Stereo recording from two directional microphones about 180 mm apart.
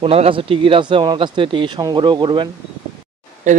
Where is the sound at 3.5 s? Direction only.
45° right (ahead or behind).